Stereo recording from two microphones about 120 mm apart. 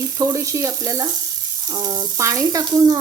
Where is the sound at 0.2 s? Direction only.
25° right (ahead or behind).